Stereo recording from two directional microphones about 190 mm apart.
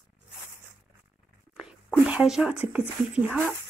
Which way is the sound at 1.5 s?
5° right (ahead or behind).